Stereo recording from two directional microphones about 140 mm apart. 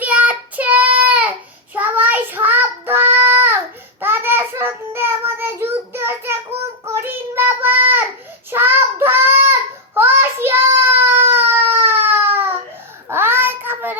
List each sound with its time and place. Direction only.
0.0 s child singing: 10° right (ahead or behind)